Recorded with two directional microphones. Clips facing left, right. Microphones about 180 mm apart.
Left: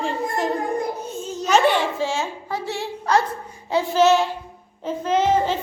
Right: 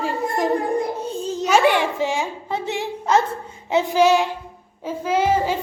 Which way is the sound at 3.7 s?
20° right (ahead or behind).